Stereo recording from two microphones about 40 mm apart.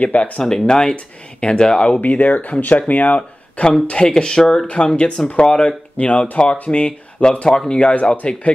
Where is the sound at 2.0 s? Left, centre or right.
Left.